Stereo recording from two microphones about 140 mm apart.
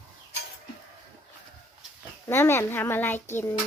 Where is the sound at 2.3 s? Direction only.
20° left (ahead or behind).